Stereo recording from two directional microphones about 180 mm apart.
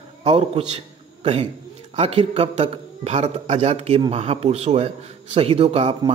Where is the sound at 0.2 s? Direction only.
35° right (ahead or behind).